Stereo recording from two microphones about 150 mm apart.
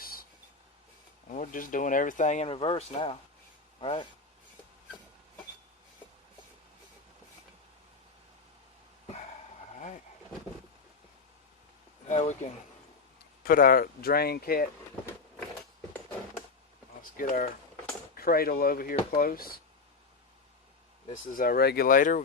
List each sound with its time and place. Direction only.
0.0 s a sound: 80° left
1.3 s speech: 60° left (ahead or behind)
2.5 s speech: 40° left (ahead or behind)
9.7 s a sound: 55° left (ahead or behind)
12.0 s speech: 50° left (ahead or behind)
13.4 s speech: 70° left (ahead or behind)
17.0 s a sound: 65° left (ahead or behind)
18.2 s speech: 85° left
21.1 s speech: 70° left (ahead or behind)